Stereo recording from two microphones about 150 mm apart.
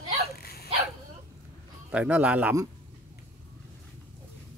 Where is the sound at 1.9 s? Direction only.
10° right (ahead or behind).